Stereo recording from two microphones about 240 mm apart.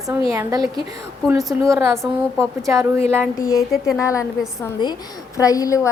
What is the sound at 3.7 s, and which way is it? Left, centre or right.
Speech, centre.